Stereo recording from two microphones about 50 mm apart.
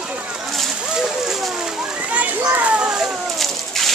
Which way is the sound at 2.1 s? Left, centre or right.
Right.